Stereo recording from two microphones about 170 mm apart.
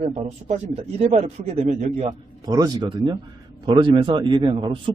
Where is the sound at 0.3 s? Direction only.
45° right (ahead or behind).